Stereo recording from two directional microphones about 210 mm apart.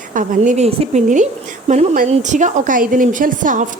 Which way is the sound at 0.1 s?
35° right (ahead or behind).